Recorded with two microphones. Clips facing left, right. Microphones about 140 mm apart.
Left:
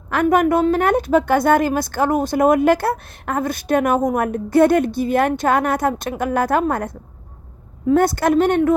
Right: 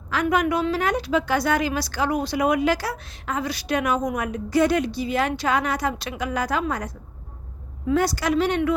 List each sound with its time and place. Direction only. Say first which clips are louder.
0.1 s a woman's voice: left 6 dB; 50° left (ahead or behind)